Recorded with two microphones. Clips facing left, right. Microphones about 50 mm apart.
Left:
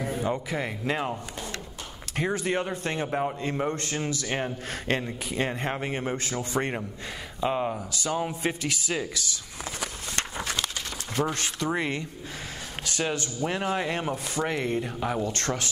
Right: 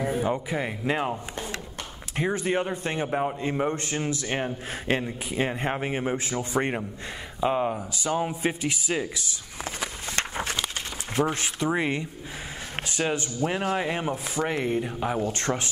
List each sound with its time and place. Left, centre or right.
0.0 s a sound: centre
0.5 s a man's voice: centre
2.1 s a man's voice: centre
7.7 s a man's voice: centre
9.8 s a sound: right
11.3 s a man's voice: centre
13.7 s a man's voice: centre
15.3 s speech: right